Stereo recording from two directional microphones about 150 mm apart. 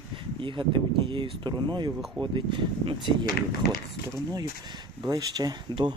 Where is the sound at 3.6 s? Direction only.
90° left.